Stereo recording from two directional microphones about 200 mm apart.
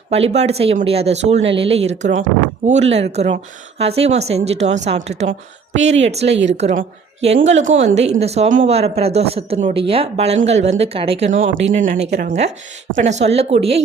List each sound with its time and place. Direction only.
0.1 s a woman's voice: 30° right (ahead or behind)
6.3 s a woman's voice: 65° right (ahead or behind)
6.6 s a woman's voice: 35° right (ahead or behind)
11.3 s speech: 70° right (ahead or behind)
12.2 s a woman's voice: 35° right (ahead or behind)